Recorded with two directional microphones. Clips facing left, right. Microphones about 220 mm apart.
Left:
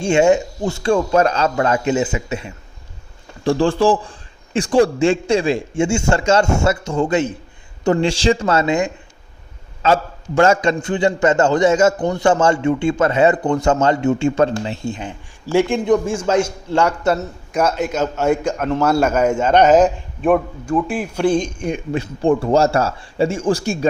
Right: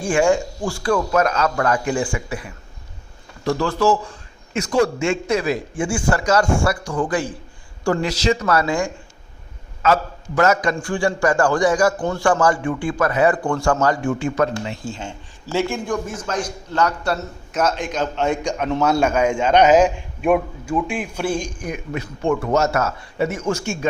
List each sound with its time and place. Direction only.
0.0 s a man's voice: 25° left (ahead or behind)
15.5 s a man's voice: 20° left (ahead or behind)
19.6 s a man's voice: 5° right (ahead or behind)
21.1 s a man's voice: 15° left (ahead or behind); by 23.9 s 35° left (ahead or behind)